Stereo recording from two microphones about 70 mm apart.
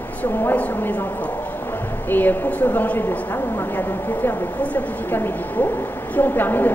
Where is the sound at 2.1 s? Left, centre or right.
Left.